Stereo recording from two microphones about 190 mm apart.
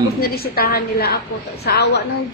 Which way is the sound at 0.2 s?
55° left (ahead or behind).